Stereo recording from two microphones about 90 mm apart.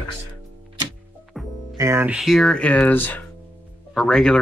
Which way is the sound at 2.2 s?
5° left (ahead or behind).